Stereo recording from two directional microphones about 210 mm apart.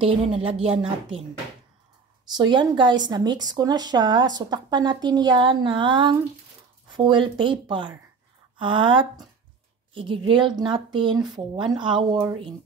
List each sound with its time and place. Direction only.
0.0 s speech: 25° right (ahead or behind)
2.3 s speech: 20° right (ahead or behind)